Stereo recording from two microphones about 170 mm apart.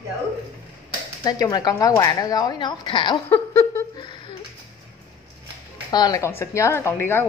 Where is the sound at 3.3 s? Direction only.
15° left (ahead or behind).